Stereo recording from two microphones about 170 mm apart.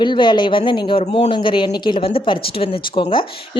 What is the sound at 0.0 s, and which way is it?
A woman's voice, 25° left (ahead or behind).